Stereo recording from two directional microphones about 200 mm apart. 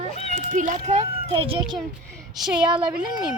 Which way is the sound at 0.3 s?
40° right (ahead or behind).